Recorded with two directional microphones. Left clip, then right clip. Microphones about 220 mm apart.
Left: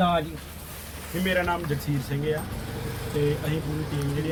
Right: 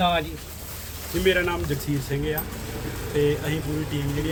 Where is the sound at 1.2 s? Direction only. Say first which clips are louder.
Right 3 dB; 5° right (ahead or behind).